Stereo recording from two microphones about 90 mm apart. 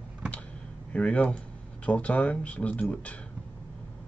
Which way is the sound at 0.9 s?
15° left (ahead or behind).